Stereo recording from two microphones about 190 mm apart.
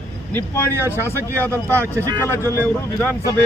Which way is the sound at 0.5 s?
10° left (ahead or behind).